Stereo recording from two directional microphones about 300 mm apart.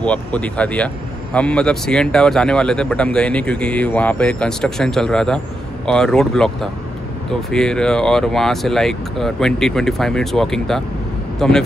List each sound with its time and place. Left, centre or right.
0.0 s speech: centre